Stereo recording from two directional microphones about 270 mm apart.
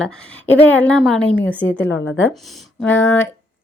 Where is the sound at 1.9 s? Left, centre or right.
Left.